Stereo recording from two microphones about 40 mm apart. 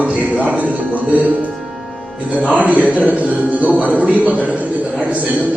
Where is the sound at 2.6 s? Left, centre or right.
Right.